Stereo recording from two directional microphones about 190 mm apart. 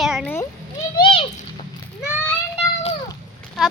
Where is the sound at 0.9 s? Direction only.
25° left (ahead or behind).